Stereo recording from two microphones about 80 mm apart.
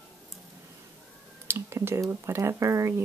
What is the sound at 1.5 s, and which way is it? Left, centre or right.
Speech, right.